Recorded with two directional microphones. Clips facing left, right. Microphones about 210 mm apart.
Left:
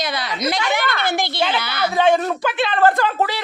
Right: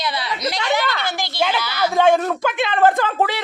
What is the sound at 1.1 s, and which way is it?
Speech, 55° left (ahead or behind).